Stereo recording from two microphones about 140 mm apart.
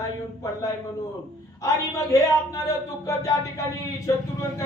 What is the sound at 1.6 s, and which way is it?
A man's voice, 25° left (ahead or behind).